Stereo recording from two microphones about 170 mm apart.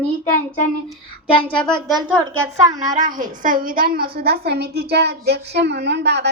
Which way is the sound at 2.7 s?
25° right (ahead or behind).